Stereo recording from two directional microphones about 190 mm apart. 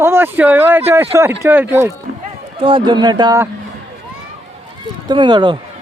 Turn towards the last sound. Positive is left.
turn(degrees=-25)  # may be behind; listen again after turning